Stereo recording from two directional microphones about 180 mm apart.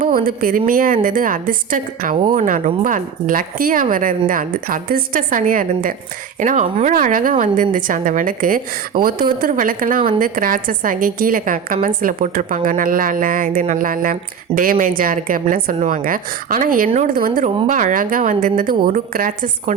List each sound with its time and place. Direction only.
0.0 s a woman's voice: 55° right (ahead or behind)